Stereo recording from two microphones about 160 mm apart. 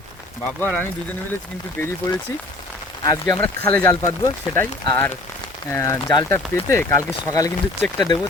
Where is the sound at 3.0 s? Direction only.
20° left (ahead or behind).